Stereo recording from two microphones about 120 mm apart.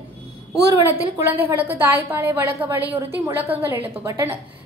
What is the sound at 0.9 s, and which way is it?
A woman's voice, 15° right (ahead or behind).